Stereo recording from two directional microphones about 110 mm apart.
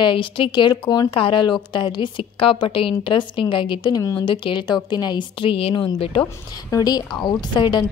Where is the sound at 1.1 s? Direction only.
50° left (ahead or behind).